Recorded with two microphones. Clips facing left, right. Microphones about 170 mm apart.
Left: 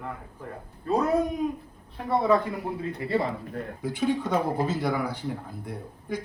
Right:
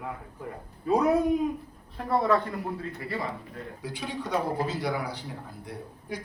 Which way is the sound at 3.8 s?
50° left (ahead or behind).